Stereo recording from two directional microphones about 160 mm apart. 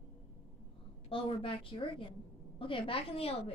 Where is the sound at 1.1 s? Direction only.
35° left (ahead or behind).